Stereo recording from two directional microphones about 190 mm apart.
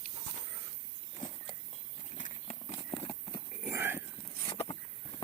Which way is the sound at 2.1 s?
40° left (ahead or behind).